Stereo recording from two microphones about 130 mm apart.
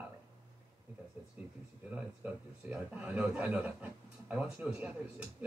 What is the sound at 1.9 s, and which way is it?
A man's voice, 10° right (ahead or behind).